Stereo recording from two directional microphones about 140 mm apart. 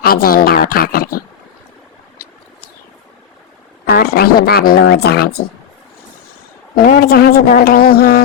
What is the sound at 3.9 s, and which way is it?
A woman's voice, 90° left.